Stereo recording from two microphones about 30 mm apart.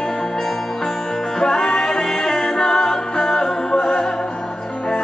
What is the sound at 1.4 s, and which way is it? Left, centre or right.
Music, left.